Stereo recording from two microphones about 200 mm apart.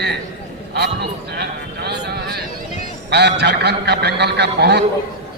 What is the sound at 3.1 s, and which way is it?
A man's voice, 55° right (ahead or behind).